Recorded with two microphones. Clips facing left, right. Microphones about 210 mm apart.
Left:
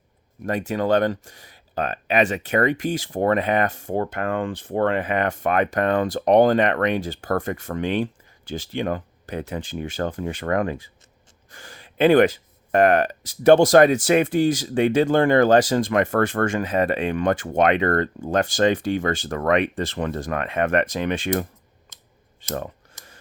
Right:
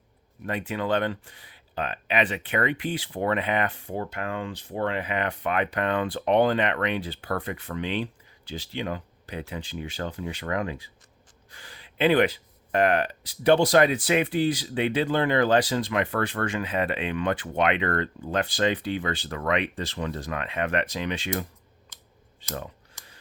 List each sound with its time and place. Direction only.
0.4 s speech: 45° left (ahead or behind)